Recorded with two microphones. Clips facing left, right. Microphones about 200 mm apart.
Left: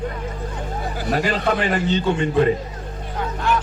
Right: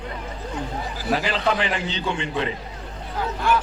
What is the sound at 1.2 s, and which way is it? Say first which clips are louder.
A man's voice: left 3 dB; 50° left (ahead or behind).